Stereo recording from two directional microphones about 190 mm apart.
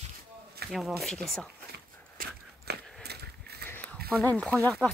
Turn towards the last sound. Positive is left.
turn(degrees=5)  # may be behind; listen again after turning